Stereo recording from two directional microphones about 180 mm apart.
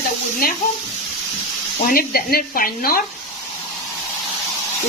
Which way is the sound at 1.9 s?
55° left (ahead or behind).